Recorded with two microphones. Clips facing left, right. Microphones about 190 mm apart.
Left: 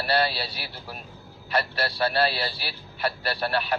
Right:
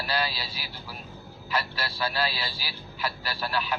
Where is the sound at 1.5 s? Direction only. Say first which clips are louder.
Left 5 dB; 60° left (ahead or behind).